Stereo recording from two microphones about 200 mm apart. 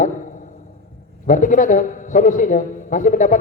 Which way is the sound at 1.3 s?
40° left (ahead or behind).